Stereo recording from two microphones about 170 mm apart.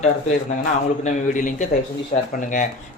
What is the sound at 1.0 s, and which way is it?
Speech, 50° left (ahead or behind).